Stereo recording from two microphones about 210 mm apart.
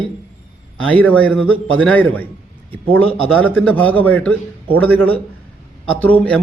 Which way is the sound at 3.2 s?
5° left (ahead or behind).